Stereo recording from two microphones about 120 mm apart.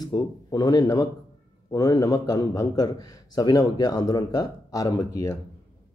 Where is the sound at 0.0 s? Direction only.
35° left (ahead or behind).